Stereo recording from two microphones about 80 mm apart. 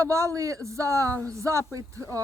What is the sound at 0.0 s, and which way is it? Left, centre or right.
Speech, right.